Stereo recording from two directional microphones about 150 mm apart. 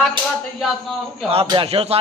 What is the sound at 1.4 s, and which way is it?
Speech, 35° right (ahead or behind).